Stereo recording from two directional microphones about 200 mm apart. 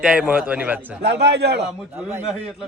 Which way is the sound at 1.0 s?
55° right (ahead or behind).